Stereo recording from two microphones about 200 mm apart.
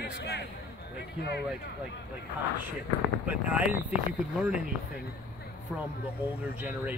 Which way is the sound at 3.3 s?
5° right (ahead or behind).